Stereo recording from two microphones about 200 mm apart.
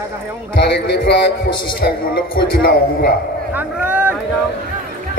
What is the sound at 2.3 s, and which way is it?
Speech, 50° left (ahead or behind).